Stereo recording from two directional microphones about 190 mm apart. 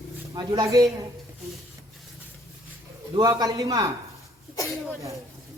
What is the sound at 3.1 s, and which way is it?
Speech, 20° right (ahead or behind).